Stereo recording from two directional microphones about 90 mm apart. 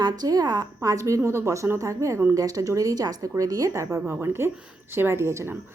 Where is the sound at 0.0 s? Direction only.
45° right (ahead or behind).